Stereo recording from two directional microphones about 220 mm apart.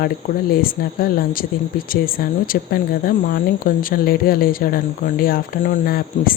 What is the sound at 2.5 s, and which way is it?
Speech, 40° left (ahead or behind).